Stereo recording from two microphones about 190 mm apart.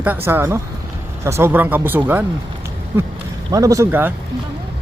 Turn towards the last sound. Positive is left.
turn(degrees=-10)  # may be behind; listen again after turning